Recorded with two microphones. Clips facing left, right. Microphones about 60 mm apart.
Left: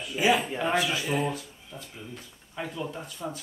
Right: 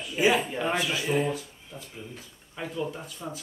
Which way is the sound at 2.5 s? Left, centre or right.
Centre.